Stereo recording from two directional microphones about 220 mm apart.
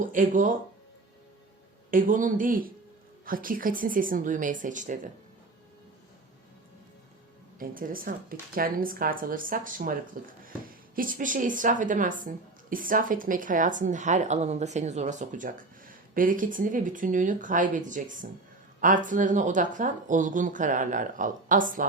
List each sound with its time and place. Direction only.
0.0 s a woman's voice: 35° right (ahead or behind)
1.9 s a woman's voice: 40° right (ahead or behind)
7.6 s a woman's voice: 40° right (ahead or behind)